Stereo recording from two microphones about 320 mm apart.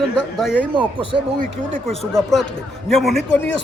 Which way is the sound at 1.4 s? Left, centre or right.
Right.